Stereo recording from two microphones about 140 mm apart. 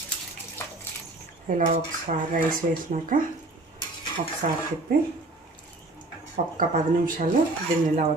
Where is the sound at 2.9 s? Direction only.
75° right (ahead or behind).